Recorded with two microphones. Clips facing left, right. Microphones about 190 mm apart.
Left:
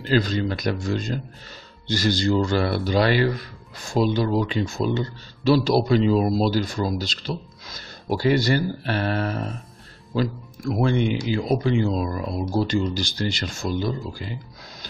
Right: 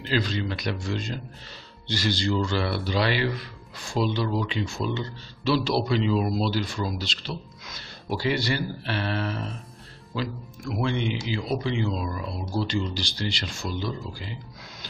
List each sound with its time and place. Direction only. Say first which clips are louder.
0.0 s speech: left 5 dB; 45° left (ahead or behind)